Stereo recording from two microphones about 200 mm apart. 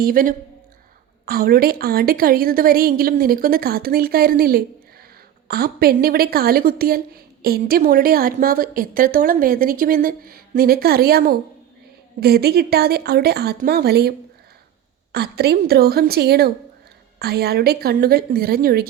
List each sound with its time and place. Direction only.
0.0 s speech: 45° right (ahead or behind)
15.1 s speech: 55° right (ahead or behind)